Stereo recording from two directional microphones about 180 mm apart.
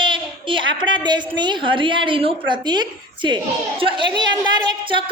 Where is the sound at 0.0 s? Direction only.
25° right (ahead or behind).